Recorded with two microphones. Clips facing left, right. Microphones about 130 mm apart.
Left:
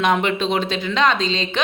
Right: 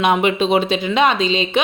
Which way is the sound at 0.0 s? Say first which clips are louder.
Right 3 dB; 15° right (ahead or behind).